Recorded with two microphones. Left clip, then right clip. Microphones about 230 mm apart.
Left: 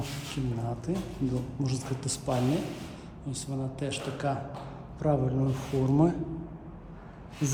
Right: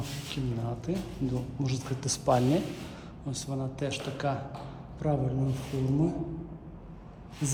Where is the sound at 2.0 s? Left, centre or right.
Centre.